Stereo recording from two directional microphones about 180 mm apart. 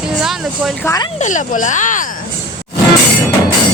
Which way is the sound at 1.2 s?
45° left (ahead or behind).